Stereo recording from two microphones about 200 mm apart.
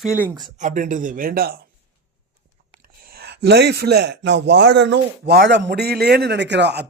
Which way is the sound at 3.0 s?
50° right (ahead or behind).